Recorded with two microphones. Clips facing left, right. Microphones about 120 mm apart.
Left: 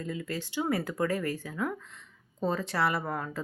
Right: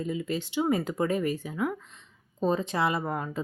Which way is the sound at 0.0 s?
15° right (ahead or behind).